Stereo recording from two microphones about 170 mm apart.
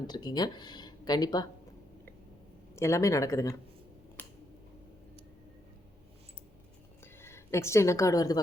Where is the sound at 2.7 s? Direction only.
15° left (ahead or behind).